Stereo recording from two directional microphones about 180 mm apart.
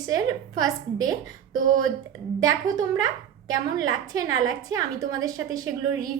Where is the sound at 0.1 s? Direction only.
20° right (ahead or behind).